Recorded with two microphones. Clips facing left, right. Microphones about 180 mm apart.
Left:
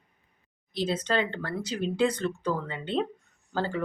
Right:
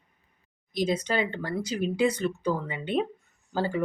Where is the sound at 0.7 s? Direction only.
10° right (ahead or behind).